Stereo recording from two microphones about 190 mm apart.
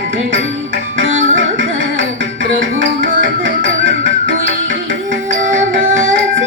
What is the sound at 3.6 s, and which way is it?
Music, 80° right.